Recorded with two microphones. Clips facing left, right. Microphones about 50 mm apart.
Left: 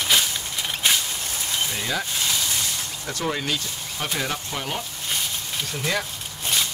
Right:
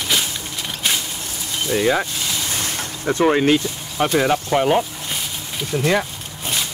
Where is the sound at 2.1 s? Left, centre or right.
Centre.